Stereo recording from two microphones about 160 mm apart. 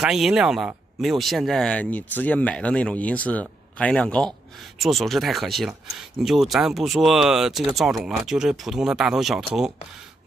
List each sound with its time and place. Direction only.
0.0 s speech: 5° right (ahead or behind)